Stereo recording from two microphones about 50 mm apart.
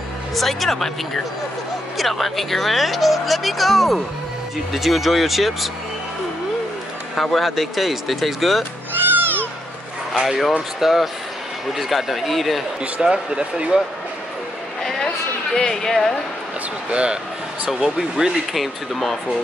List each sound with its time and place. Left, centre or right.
0.3 s speech: centre
7.2 s speech: centre
9.1 s a sound: right
10.1 s speech: centre
13.0 s speech: centre
14.8 s a sound: centre
15.5 s speech: centre
16.9 s speech: right
17.6 s speech: centre